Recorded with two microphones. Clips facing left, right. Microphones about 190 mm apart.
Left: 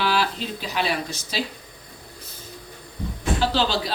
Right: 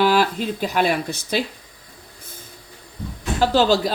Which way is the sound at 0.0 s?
50° right (ahead or behind).